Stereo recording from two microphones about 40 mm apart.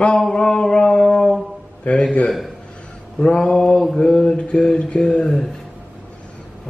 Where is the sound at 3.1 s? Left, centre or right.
Left.